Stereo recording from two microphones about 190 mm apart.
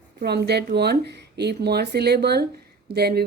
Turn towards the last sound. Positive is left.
turn(degrees=-55)  # may be behind; listen again after turning